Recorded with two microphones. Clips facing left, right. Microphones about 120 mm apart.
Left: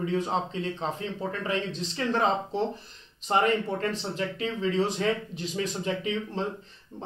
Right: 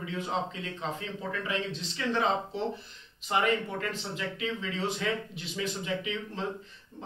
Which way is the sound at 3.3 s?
35° left (ahead or behind).